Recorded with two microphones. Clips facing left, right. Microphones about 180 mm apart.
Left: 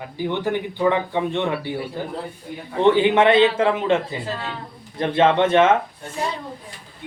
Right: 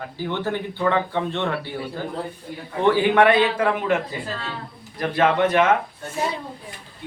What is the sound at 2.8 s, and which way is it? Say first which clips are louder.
A man's voice: left 1 dB; 20° left (ahead or behind).